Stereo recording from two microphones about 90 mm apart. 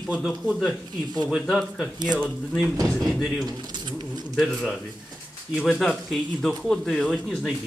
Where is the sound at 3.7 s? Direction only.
55° right (ahead or behind).